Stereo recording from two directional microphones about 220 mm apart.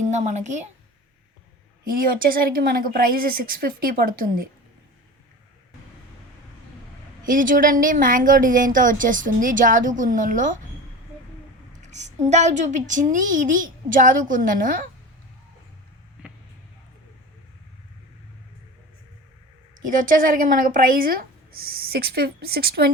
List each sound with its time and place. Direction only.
0.1 s a woman's voice: 30° right (ahead or behind)
1.8 s a woman's voice: 40° right (ahead or behind)
7.3 s a woman's voice: 40° right (ahead or behind)
11.8 s a sound: 30° right (ahead or behind)
12.3 s a woman's voice: 30° right (ahead or behind)
19.8 s a woman's voice: 35° right (ahead or behind)